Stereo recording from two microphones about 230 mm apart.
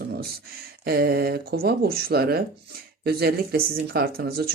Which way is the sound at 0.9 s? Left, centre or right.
Right.